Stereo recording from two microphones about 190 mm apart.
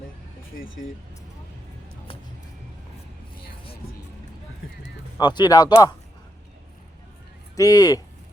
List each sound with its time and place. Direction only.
5.1 s speech: 25° left (ahead or behind)
7.5 s speech: 20° left (ahead or behind)